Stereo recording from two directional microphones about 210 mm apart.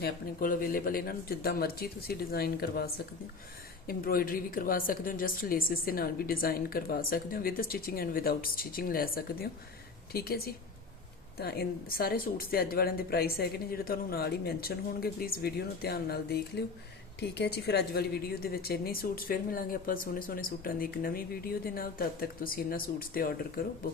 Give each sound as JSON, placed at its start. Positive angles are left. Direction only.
{"t": 0.0, "sound": "a woman's voice", "side_deg": 40}